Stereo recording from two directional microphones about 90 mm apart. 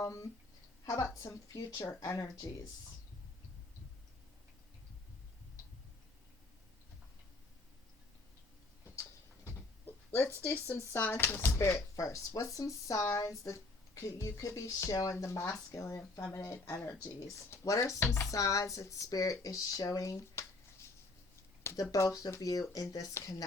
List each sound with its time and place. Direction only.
0.0 s speech: 35° left (ahead or behind)
9.0 s speech: 30° left (ahead or behind)
21.9 s speech: 35° left (ahead or behind)